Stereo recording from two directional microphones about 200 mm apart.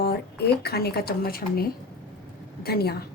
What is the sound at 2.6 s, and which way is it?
Speech, 50° left (ahead or behind).